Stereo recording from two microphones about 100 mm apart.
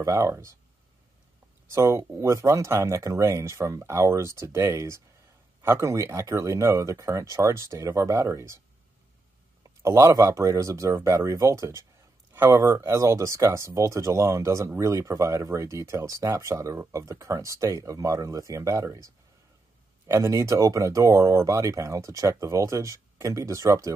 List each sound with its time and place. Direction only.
0.0 s speech: 30° right (ahead or behind)
1.7 s speech: 30° right (ahead or behind)
9.6 s speech: 30° right (ahead or behind)
20.1 s speech: 30° right (ahead or behind)